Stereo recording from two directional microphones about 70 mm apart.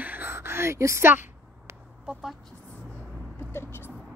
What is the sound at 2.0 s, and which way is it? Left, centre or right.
Speech, centre.